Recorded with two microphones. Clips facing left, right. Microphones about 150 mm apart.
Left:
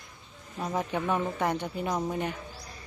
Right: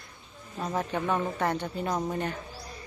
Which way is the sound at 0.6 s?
10° left (ahead or behind).